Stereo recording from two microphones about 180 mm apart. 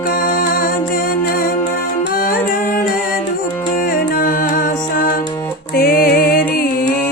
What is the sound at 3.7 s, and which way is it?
Music, 55° left (ahead or behind).